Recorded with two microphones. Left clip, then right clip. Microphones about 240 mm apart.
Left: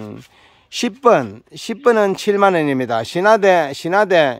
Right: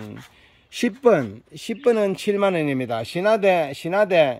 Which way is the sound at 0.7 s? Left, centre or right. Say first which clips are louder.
Left 4 dB; centre.